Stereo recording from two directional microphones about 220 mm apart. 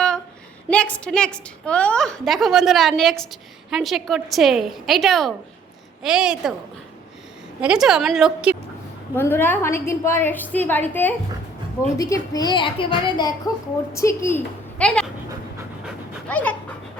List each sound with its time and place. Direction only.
0.7 s a woman's voice: 5° left (ahead or behind)
7.6 s a woman's voice: 5° right (ahead or behind)
9.1 s a woman's voice: 10° left (ahead or behind)
16.3 s a woman's voice: 5° left (ahead or behind)